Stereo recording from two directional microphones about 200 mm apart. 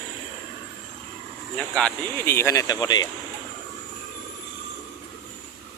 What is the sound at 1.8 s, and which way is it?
Speech, 10° left (ahead or behind).